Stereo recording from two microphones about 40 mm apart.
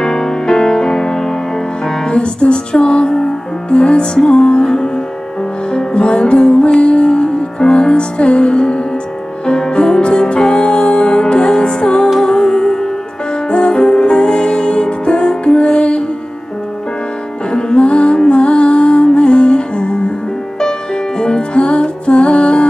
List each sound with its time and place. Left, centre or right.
0.0 s music: centre
2.0 s music: left
17.5 s music: left